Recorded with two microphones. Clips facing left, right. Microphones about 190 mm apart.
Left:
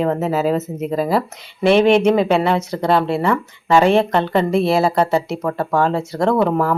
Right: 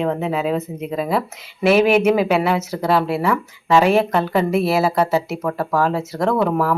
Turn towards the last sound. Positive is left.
turn(degrees=0)  # may be behind; listen again after turning